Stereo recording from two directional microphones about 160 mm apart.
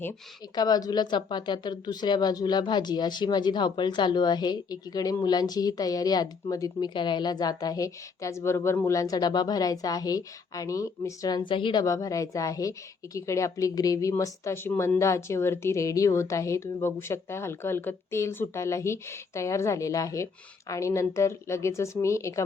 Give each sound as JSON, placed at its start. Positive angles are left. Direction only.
{"t": 0.5, "sound": "a woman's voice", "side_deg": 25}